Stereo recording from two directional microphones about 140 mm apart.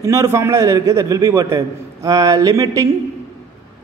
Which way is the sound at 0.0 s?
20° right (ahead or behind).